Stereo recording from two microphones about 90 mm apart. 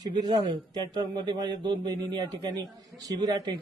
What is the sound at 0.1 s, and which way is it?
Speech, 55° right (ahead or behind).